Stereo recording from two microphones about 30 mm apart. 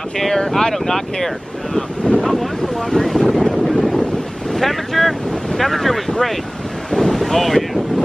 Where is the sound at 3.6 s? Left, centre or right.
Centre.